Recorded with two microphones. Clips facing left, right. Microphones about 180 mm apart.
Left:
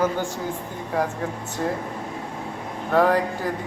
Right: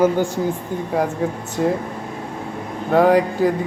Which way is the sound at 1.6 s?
15° right (ahead or behind).